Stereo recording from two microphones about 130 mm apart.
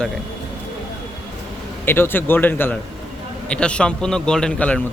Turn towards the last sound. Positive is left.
turn(degrees=10)  # may be behind; listen again after turning